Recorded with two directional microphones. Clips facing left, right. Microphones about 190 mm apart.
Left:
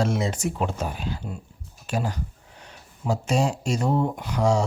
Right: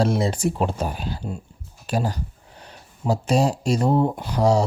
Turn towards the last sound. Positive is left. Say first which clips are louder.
# right 3 dB
turn(degrees=-35)  # may be behind; listen again after turning